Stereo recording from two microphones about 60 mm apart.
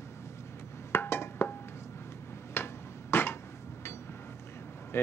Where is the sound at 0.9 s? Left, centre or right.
Left.